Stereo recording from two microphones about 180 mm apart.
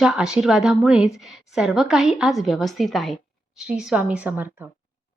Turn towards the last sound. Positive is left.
turn(degrees=-10)  # may be behind; listen again after turning